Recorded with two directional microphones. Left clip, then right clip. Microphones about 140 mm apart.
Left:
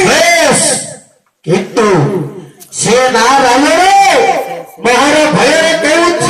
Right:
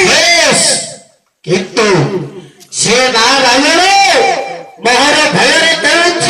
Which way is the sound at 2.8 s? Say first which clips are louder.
Left 1 dB; 90° left.